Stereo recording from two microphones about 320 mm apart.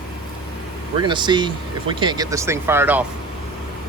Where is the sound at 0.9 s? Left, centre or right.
Centre.